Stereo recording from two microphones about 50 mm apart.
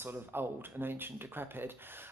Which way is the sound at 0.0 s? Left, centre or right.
Right.